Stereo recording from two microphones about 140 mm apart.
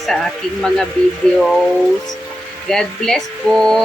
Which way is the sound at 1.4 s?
Centre (ahead or behind).